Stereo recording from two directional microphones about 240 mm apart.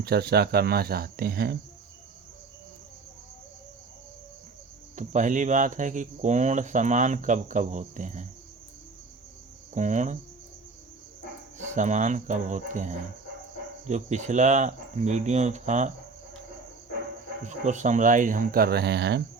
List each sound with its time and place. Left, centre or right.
0.0 s speech: right
4.9 s speech: right
9.7 s speech: right
11.5 s speech: right
17.4 s speech: right